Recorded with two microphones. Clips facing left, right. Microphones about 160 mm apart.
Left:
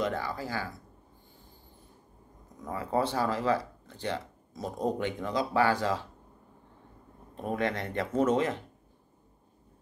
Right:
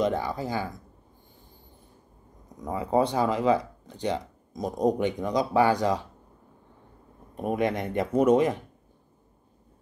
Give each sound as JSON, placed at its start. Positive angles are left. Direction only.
{"t": 0.0, "sound": "speech", "side_deg": -20}
{"t": 2.6, "sound": "speech", "side_deg": -15}
{"t": 7.3, "sound": "speech", "side_deg": -15}